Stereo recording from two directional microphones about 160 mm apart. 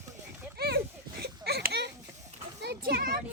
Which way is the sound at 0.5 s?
80° right.